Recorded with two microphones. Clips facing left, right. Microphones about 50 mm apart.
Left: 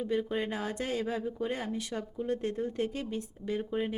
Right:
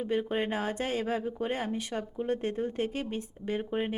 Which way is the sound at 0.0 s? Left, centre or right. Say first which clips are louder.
Right 1 dB; right.